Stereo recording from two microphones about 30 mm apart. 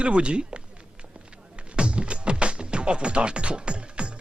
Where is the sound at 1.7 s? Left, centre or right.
Right.